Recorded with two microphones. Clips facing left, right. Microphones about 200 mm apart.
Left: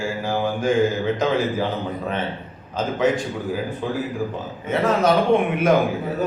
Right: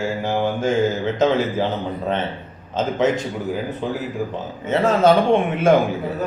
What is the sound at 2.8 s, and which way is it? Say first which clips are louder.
Speech: right 1 dB; 20° right (ahead or behind).